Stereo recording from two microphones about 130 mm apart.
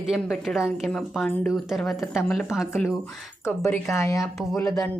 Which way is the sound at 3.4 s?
20° left (ahead or behind).